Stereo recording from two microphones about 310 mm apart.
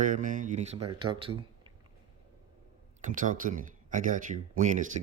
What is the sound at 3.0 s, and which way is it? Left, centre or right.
Speech, right.